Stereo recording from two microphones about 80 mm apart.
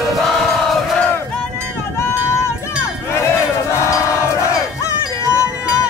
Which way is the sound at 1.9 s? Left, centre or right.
Left.